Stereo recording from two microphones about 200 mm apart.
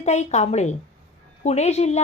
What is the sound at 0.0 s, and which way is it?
Speech, 35° left (ahead or behind).